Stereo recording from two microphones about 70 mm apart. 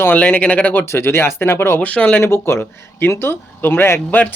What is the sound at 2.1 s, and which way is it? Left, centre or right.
Speech, left.